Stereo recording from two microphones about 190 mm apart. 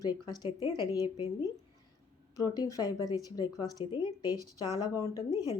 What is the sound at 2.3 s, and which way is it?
Speech, 20° left (ahead or behind).